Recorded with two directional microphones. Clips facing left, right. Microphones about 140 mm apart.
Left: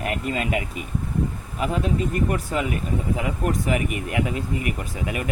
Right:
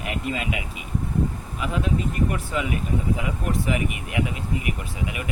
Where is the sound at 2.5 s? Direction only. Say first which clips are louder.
Left 1 dB; 40° left (ahead or behind).